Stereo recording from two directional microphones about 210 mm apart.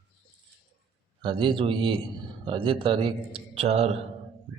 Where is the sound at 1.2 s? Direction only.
25° right (ahead or behind).